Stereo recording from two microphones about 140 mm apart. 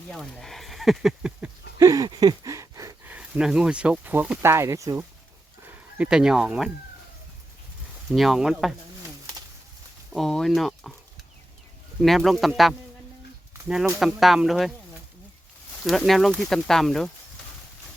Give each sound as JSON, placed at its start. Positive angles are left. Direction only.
{"t": 0.1, "sound": "speech", "side_deg": 5}
{"t": 1.8, "sound": "a sound", "side_deg": -25}
{"t": 3.1, "sound": "speech", "side_deg": -5}
{"t": 5.6, "sound": "speech", "side_deg": -5}
{"t": 8.1, "sound": "speech", "side_deg": 0}
{"t": 10.1, "sound": "speech", "side_deg": 0}
{"t": 12.0, "sound": "speech", "side_deg": 0}
{"t": 15.8, "sound": "speech", "side_deg": 0}